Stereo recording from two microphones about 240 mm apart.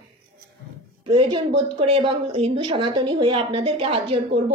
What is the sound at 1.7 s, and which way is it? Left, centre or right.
Speech, right.